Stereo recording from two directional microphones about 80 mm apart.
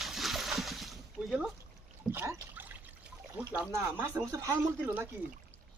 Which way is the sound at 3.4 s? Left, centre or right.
Centre.